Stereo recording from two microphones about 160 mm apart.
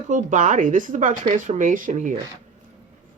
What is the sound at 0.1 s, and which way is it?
Speech, 55° right (ahead or behind).